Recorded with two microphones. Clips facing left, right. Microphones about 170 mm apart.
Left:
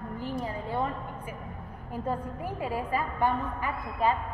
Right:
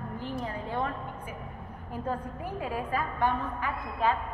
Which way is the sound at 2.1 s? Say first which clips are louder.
Left 1 dB; 10° left (ahead or behind).